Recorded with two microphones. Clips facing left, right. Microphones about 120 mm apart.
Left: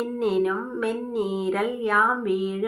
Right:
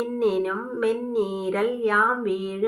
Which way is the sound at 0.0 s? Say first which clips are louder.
Even; centre (ahead or behind).